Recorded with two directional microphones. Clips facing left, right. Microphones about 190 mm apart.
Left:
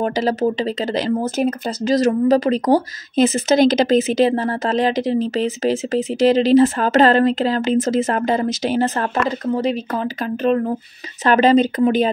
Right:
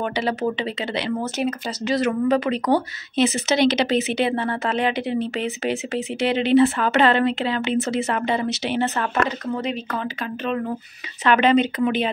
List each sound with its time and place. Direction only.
0.0 s speech: 40° left (ahead or behind)
11.2 s speech: 40° left (ahead or behind)